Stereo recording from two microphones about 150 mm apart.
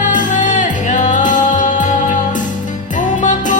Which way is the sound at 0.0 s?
60° left (ahead or behind).